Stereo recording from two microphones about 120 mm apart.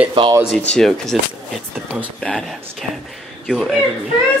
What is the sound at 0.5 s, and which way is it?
Speech, 5° left (ahead or behind).